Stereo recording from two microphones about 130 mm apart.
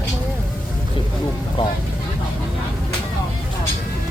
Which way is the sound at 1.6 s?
40° left (ahead or behind).